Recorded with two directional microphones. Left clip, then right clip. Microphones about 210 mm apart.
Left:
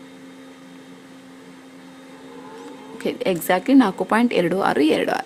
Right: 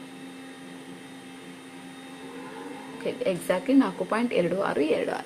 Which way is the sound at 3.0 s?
40° left (ahead or behind).